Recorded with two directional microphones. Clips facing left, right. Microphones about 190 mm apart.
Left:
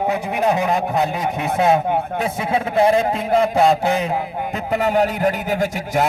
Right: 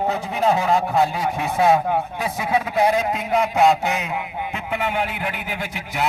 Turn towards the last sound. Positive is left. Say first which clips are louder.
# left 6 dB
turn(degrees=45)  # may be behind; listen again after turning